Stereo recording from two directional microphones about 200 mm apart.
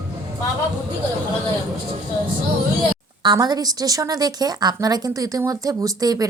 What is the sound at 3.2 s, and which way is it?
A woman's voice, 20° right (ahead or behind).